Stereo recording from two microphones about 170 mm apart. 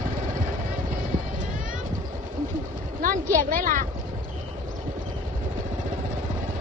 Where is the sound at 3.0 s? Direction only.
50° right (ahead or behind).